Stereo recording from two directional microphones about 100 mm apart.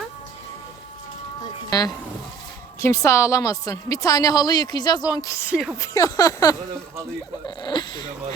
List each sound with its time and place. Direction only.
2.8 s a woman's voice: 30° left (ahead or behind)
5.5 s speech: 5° right (ahead or behind)
5.8 s a woman's voice: 35° left (ahead or behind)
7.4 s speech: 50° left (ahead or behind)